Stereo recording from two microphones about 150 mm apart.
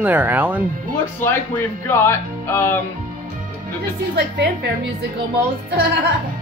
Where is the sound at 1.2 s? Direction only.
15° left (ahead or behind).